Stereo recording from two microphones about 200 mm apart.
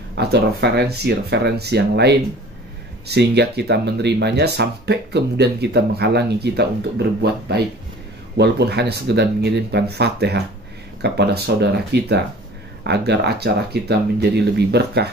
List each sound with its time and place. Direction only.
0.2 s speech: 55° right (ahead or behind)